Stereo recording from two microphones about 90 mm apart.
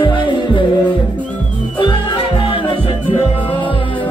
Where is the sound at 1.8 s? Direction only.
65° left (ahead or behind).